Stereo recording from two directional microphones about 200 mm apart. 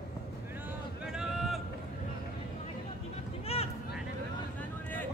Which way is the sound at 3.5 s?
30° left (ahead or behind).